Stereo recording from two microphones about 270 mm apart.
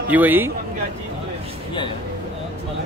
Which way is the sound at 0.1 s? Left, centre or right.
Centre.